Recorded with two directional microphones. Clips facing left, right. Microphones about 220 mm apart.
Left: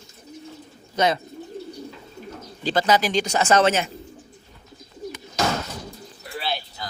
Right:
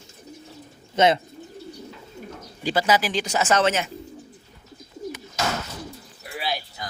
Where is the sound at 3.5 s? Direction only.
35° left (ahead or behind).